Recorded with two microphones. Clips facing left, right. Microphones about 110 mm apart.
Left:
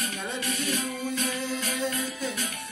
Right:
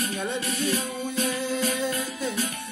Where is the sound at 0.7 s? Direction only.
35° right (ahead or behind).